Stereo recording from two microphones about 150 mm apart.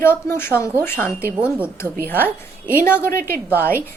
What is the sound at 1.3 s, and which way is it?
Speech, 10° right (ahead or behind).